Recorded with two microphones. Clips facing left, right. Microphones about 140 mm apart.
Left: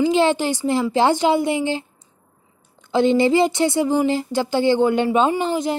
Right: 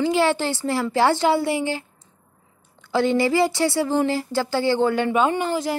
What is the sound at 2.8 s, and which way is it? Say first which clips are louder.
Speech: left 3 dB; 20° left (ahead or behind).